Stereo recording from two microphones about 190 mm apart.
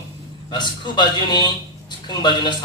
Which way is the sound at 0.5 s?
25° left (ahead or behind).